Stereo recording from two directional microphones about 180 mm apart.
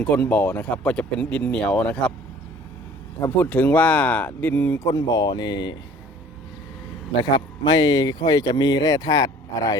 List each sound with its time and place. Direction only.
0.0 s speech: 5° left (ahead or behind)
3.2 s speech: 10° left (ahead or behind)
7.3 s speech: 25° left (ahead or behind)